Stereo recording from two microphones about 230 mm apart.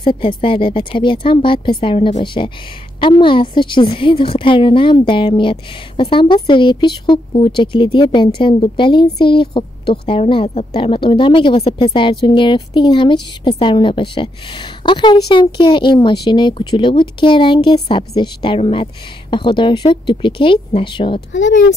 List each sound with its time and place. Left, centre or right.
0.0 s a woman's voice: left
21.3 s speech: left